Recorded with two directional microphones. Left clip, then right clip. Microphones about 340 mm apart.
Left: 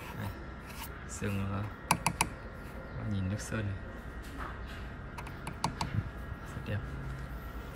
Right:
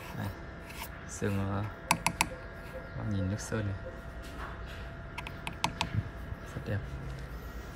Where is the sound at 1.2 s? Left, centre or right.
Centre.